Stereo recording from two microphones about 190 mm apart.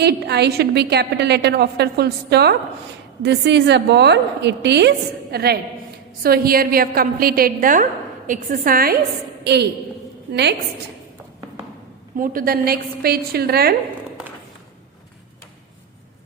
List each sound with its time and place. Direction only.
0.0 s a woman's voice: 60° right (ahead or behind)
9.4 s a woman's voice: 60° right (ahead or behind)
12.1 s a woman's voice: 45° right (ahead or behind)